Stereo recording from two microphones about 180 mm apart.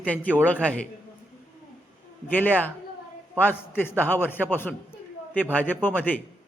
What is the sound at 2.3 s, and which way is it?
A man's voice, 10° left (ahead or behind).